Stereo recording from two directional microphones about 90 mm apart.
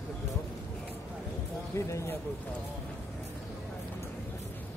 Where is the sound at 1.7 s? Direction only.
30° left (ahead or behind).